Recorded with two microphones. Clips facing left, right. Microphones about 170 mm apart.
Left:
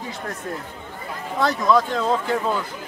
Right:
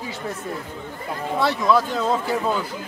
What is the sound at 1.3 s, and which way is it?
Speech, 5° right (ahead or behind).